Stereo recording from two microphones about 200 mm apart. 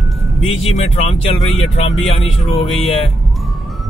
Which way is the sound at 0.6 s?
30° left (ahead or behind).